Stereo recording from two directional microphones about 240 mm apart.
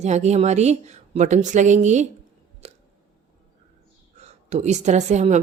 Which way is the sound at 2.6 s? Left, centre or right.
Right.